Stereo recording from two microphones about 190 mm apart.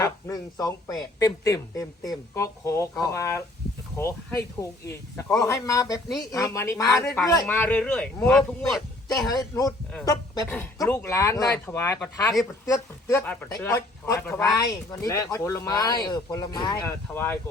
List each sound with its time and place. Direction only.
0.0 s speech: 20° left (ahead or behind); by 9.3 s centre (ahead or behind)
9.3 s speech: 20° left (ahead or behind)